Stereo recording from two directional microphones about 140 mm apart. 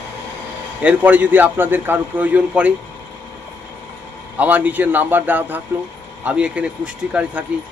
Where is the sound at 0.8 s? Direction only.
10° right (ahead or behind).